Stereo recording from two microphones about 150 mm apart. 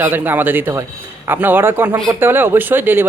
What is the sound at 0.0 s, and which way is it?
A man's voice, 15° right (ahead or behind).